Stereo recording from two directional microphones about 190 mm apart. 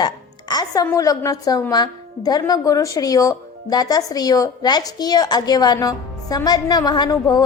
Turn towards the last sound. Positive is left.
turn(degrees=20)  # may be behind; listen again after turning